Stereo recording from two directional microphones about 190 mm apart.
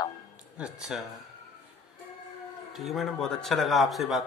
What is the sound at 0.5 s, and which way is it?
Speech, 5° right (ahead or behind).